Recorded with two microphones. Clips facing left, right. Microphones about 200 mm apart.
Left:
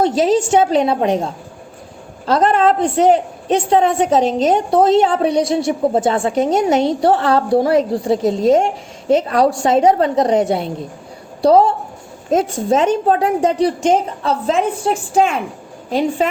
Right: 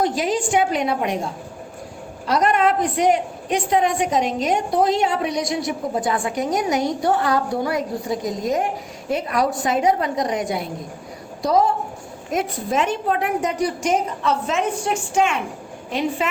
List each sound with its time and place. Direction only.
0.0 s a woman's voice: 30° left (ahead or behind)
2.2 s a woman's voice: 30° left (ahead or behind)